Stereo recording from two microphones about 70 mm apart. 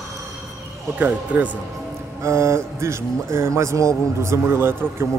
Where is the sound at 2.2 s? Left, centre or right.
Right.